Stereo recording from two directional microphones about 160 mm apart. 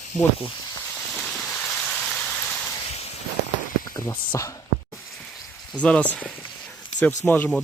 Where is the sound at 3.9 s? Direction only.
20° left (ahead or behind).